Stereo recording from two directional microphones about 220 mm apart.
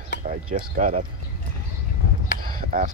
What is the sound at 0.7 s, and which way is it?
Speech, 35° right (ahead or behind).